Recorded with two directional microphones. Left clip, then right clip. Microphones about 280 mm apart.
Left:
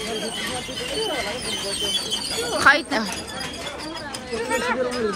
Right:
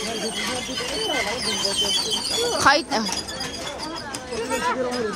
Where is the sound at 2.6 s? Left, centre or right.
Centre.